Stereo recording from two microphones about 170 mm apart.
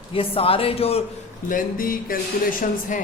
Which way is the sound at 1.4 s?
55° left (ahead or behind).